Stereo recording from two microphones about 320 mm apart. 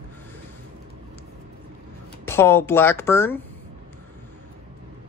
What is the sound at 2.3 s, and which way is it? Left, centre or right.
Speech, centre.